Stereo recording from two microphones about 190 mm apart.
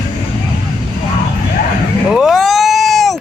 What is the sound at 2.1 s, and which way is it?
Cat, centre (ahead or behind).